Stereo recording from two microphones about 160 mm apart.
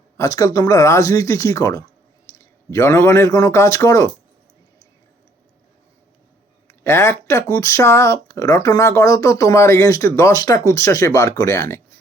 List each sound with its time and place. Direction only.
0.2 s speech: 20° left (ahead or behind)
6.7 s speech: 15° left (ahead or behind)